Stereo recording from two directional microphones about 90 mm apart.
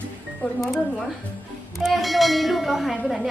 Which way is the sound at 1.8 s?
Centre (ahead or behind).